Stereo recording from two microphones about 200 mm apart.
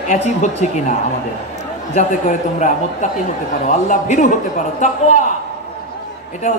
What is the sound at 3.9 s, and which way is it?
Speech, 40° left (ahead or behind).